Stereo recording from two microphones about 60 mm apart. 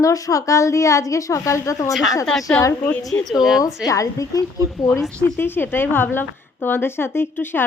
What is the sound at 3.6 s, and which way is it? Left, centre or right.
Speech, left.